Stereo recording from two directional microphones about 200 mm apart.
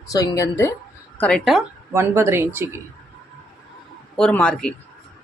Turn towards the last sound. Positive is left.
turn(degrees=5)  # may be behind; listen again after turning